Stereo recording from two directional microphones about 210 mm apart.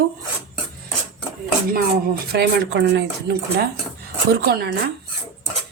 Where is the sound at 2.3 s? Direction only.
50° right (ahead or behind).